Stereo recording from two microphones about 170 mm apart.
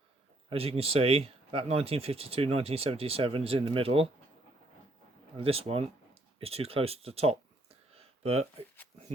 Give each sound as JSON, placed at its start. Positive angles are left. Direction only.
{"t": 0.5, "sound": "speech", "side_deg": -35}
{"t": 5.4, "sound": "speech", "side_deg": -35}
{"t": 6.4, "sound": "a sound", "side_deg": -35}